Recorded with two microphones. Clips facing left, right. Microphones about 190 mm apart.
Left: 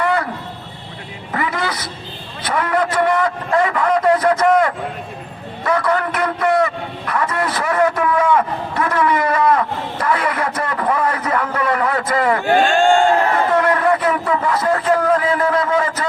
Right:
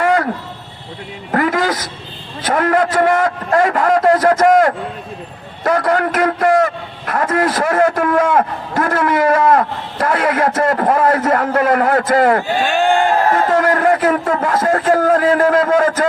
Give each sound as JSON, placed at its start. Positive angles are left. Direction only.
{"t": 0.0, "sound": "a sound", "side_deg": -45}
{"t": 1.3, "sound": "a man's voice", "side_deg": -45}
{"t": 12.8, "sound": "speech", "side_deg": -5}
{"t": 13.5, "sound": "a man's voice", "side_deg": -45}